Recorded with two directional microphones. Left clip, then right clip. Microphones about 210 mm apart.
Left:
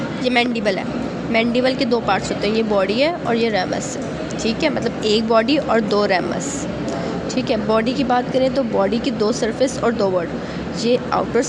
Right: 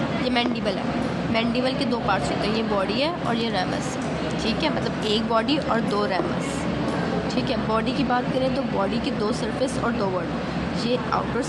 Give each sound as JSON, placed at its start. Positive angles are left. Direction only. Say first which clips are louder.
{"t": 0.3, "sound": "speech", "louder": "left 8 dB", "side_deg": 30}
{"t": 7.3, "sound": "speech", "louder": "left 8 dB", "side_deg": 25}